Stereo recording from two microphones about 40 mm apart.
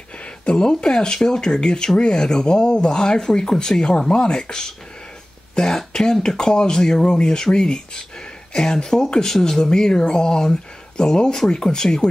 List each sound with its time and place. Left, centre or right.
0.2 s speech: left